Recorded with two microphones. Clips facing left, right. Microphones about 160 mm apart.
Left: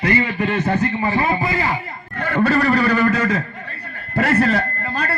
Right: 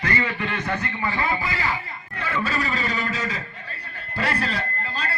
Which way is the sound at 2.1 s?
55° left (ahead or behind).